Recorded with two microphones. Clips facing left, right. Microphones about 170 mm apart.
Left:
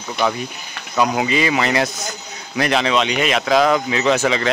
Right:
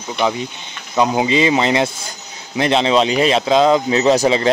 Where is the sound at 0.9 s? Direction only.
25° right (ahead or behind).